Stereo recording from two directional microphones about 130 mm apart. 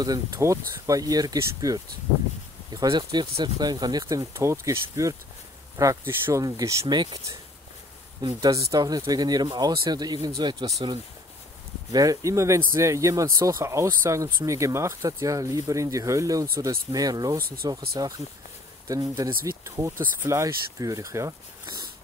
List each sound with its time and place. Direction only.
0.0 s speech: 30° right (ahead or behind)
11.9 s speech: 25° right (ahead or behind)